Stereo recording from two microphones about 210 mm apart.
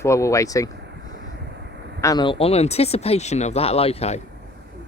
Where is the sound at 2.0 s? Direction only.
20° left (ahead or behind).